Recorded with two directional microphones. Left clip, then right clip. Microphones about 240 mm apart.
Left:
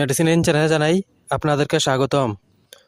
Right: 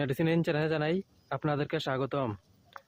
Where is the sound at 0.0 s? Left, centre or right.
Left.